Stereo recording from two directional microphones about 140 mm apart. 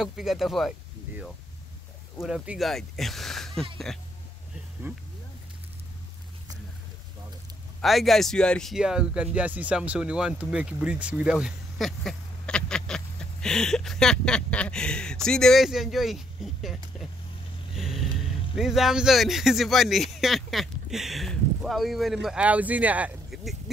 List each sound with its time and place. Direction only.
0.0 s speech: 5° right (ahead or behind)
2.2 s speech: 5° right (ahead or behind)
4.9 s speech: 15° right (ahead or behind)
7.8 s speech: centre (ahead or behind)
17.7 s a sound: centre (ahead or behind)
18.6 s speech: centre (ahead or behind)